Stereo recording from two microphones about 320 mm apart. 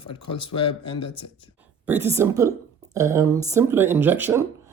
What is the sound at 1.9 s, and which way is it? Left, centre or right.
Speech, centre.